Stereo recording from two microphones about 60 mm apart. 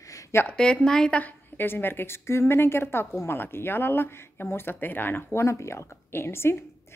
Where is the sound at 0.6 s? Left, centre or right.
Centre.